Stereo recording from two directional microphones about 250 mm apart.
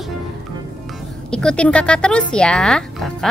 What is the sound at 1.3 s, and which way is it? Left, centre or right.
Speech, centre.